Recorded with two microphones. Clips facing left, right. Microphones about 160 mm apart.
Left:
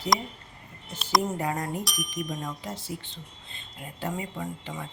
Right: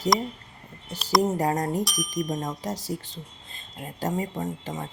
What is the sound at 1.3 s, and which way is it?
Speech, 40° right (ahead or behind).